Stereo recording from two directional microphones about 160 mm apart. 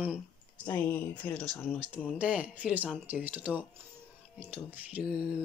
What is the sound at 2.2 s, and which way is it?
Speech, 10° right (ahead or behind).